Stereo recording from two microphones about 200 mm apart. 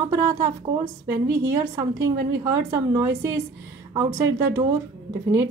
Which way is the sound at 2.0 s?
15° right (ahead or behind).